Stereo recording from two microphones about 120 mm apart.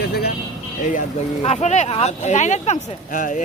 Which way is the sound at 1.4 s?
65° left (ahead or behind).